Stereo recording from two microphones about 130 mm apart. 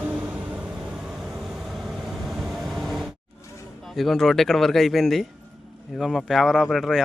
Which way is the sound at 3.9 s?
Centre (ahead or behind).